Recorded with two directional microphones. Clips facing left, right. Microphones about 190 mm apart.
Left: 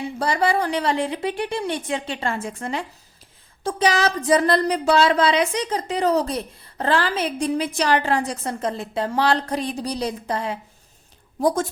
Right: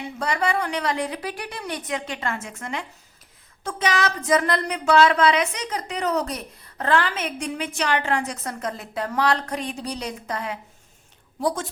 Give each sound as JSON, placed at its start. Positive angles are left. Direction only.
{"t": 0.2, "sound": "speech", "side_deg": 35}
{"t": 11.3, "sound": "a woman's voice", "side_deg": 45}